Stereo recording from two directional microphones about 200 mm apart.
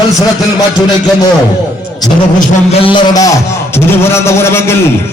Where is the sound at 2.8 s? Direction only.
20° left (ahead or behind).